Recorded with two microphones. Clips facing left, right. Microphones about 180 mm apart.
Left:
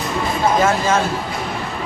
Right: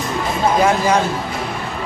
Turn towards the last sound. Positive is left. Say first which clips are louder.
# right 2 dB
turn(degrees=-15)  # may be behind; listen again after turning